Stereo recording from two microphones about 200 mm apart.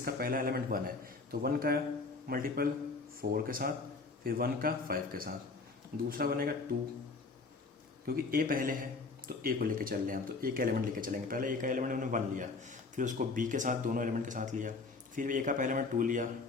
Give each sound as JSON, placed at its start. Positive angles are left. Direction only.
{"t": 0.0, "sound": "speech", "side_deg": -45}
{"t": 8.0, "sound": "speech", "side_deg": -45}